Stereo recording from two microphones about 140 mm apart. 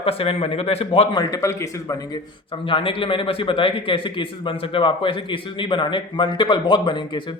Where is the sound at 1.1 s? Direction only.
25° left (ahead or behind).